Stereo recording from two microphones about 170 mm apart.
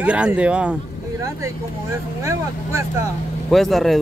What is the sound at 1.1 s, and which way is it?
Speech, 15° right (ahead or behind).